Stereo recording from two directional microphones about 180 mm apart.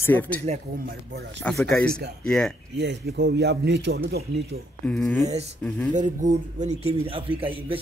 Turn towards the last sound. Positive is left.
turn(degrees=-30)  # may be behind; listen again after turning